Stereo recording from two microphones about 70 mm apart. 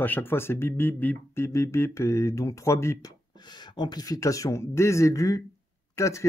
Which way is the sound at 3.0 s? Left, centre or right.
Left.